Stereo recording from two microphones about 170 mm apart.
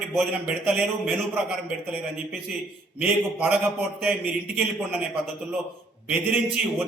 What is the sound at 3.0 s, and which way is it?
A man's voice, 10° right (ahead or behind).